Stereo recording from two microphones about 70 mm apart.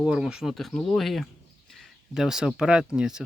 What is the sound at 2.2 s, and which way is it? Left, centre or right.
Speech, centre.